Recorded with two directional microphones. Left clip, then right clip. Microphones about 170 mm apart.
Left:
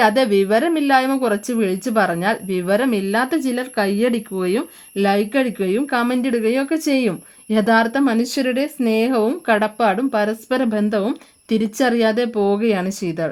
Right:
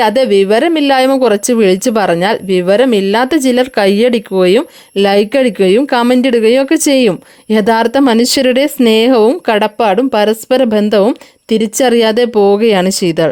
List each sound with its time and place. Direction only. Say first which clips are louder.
0.0 s speech: right 6 dB; 35° right (ahead or behind)